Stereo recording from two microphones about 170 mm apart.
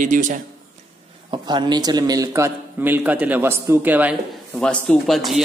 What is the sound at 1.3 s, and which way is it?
A man's voice, 25° right (ahead or behind).